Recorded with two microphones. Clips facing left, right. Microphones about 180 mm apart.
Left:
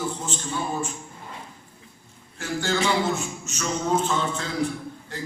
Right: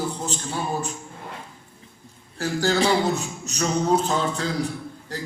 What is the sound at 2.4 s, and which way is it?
A man's voice, 35° right (ahead or behind).